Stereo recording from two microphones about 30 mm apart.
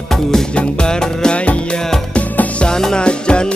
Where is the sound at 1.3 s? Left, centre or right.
Left.